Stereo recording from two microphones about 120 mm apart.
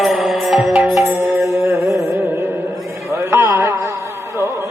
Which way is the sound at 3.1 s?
25° right (ahead or behind).